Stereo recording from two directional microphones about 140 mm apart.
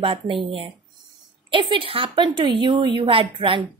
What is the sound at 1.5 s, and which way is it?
A woman's voice, 35° right (ahead or behind).